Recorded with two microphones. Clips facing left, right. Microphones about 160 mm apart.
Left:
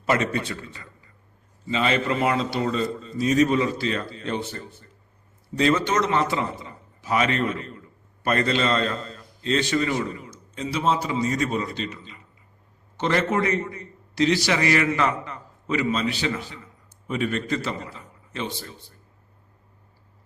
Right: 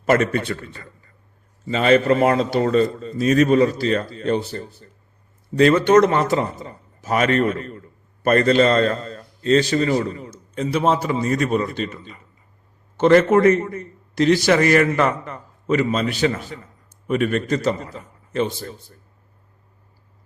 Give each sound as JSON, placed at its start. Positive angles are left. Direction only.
{"t": 0.0, "sound": "a man's voice", "side_deg": -50}
{"t": 3.6, "sound": "a man's voice", "side_deg": -45}
{"t": 5.5, "sound": "a man's voice", "side_deg": -60}
{"t": 10.5, "sound": "a man's voice", "side_deg": -55}